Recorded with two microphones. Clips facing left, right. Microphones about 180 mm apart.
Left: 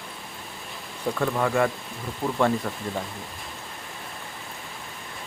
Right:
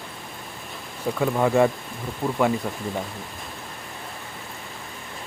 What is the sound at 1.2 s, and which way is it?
Speech, 20° right (ahead or behind).